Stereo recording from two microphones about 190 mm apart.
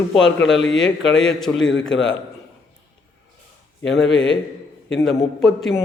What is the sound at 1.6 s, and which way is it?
Speech, 80° left.